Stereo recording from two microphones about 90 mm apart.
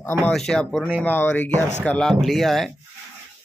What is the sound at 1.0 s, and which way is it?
Speech, 20° left (ahead or behind).